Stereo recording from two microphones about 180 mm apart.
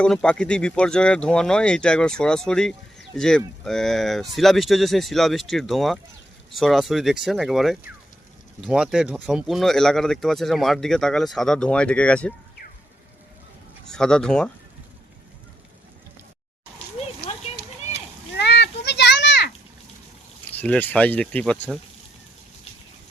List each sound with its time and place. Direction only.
0.0 s speech: 5° left (ahead or behind)
13.9 s speech: 5° left (ahead or behind)
17.2 s a sound: 60° left (ahead or behind); by 19.5 s 80° left
20.5 s speech: 10° left (ahead or behind)